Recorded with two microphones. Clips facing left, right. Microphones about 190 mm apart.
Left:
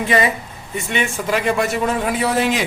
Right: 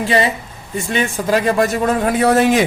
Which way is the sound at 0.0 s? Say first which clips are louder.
Right 1 dB; 30° right (ahead or behind).